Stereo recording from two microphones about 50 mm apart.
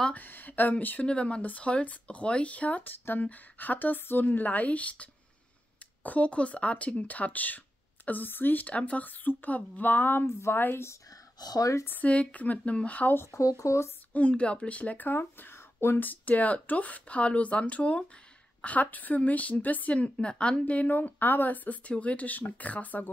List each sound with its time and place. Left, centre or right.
0.1 s a woman's voice: left
1.0 s a woman's voice: left
10.2 s a woman's voice: left
10.6 s speech: left
12.0 s speech: left
13.3 s speech: left
14.1 s speech: left
15.0 s speech: left
16.0 s a woman's voice: left